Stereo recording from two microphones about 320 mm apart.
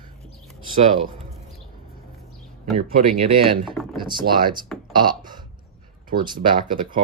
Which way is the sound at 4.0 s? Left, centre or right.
Centre.